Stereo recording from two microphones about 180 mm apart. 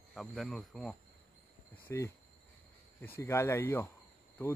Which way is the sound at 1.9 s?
15° left (ahead or behind).